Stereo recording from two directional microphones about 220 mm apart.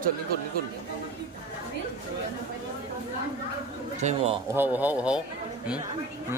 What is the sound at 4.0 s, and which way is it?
Speech, 30° right (ahead or behind).